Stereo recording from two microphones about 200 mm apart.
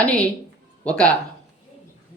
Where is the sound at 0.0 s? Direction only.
5° left (ahead or behind).